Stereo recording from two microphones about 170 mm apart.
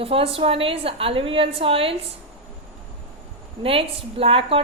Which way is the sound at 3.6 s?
35° right (ahead or behind).